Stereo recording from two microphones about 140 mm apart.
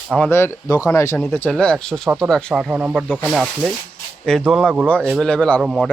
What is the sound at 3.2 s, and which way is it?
Speech, centre (ahead or behind).